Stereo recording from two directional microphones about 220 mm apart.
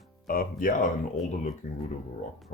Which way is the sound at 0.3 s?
40° left (ahead or behind).